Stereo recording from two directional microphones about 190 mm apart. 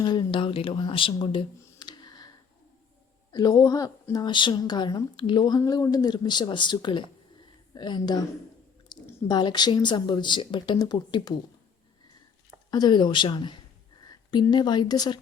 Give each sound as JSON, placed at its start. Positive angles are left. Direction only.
{"t": 0.0, "sound": "speech", "side_deg": 20}
{"t": 3.3, "sound": "speech", "side_deg": 20}
{"t": 12.7, "sound": "a woman's voice", "side_deg": 20}